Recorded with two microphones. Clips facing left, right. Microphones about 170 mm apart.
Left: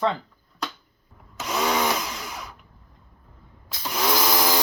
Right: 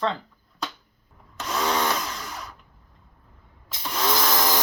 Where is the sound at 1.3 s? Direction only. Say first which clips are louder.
Left 1 dB; 10° left (ahead or behind).